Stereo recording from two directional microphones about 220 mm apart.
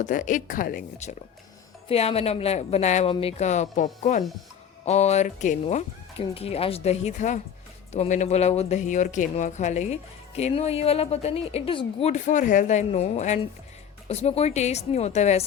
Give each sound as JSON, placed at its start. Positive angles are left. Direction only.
{"t": 0.0, "sound": "speech", "side_deg": 35}